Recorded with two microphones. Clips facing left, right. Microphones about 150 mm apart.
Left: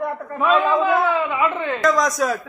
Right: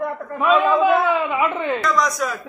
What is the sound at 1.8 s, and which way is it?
Speech, 45° left (ahead or behind).